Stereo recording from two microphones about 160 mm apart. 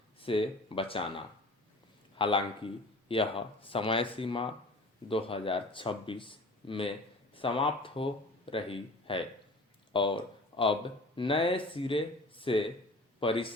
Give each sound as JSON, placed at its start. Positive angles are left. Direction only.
{"t": 0.2, "sound": "a man's voice", "side_deg": 35}